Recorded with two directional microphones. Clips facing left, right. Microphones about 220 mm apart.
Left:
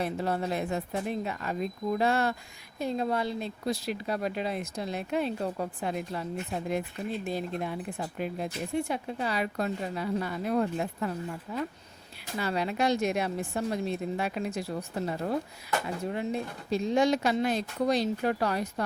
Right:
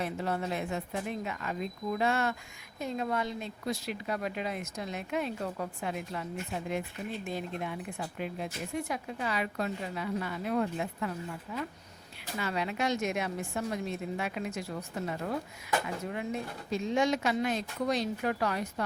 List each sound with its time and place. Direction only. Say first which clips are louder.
0.0 s speech: left 3 dB; 35° left (ahead or behind)
7.3 s speech: left 4 dB; 35° left (ahead or behind)